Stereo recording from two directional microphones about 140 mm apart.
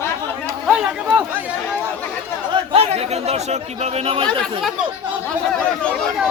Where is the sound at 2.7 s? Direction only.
45° right (ahead or behind).